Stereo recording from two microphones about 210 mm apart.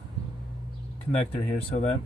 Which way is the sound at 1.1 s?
30° left (ahead or behind).